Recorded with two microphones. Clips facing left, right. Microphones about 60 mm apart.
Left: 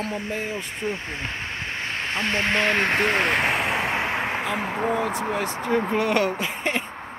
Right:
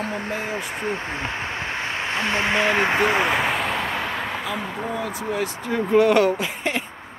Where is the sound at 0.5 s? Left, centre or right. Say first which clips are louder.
Right 2 dB; right.